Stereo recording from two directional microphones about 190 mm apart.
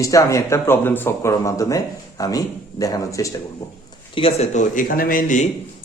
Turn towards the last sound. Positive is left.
turn(degrees=45)  # may be behind; listen again after turning